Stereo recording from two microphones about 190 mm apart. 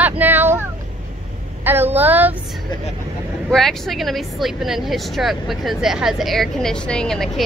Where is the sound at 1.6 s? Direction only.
10° right (ahead or behind).